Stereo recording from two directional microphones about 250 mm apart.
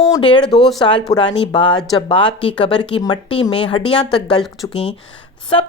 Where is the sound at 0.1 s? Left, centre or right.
Centre.